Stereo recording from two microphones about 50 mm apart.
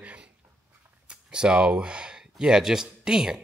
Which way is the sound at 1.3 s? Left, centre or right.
Centre.